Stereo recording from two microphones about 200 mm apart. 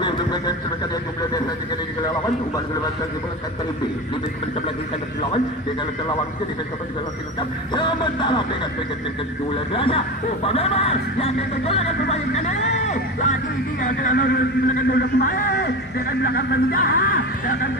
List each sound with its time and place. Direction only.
0.0 s a sound: 20° left (ahead or behind)
7.7 s music: 25° left (ahead or behind)
9.5 s speech: 25° left (ahead or behind); by 17.6 s 50° left (ahead or behind)